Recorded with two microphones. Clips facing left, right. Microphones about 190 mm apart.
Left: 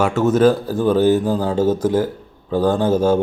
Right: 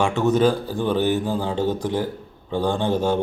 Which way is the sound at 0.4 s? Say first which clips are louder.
Left 5 dB; 40° left (ahead or behind).